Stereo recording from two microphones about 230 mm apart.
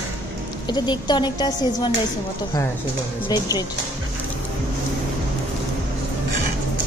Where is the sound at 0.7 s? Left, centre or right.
Centre.